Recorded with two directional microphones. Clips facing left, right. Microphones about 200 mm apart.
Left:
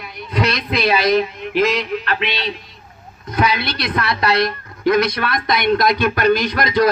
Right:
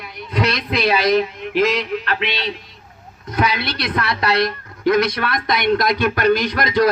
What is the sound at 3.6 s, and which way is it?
A woman's voice, 55° right (ahead or behind).